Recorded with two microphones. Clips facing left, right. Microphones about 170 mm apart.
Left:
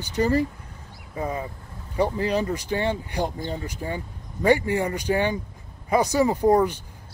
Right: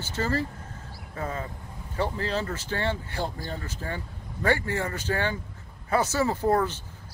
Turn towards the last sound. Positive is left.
turn(degrees=15)  # may be behind; listen again after turning